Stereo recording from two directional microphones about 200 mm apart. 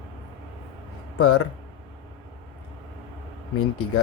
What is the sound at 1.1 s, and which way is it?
Speech, 90° left.